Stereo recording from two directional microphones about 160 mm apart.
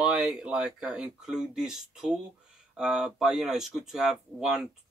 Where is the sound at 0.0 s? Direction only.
5° right (ahead or behind).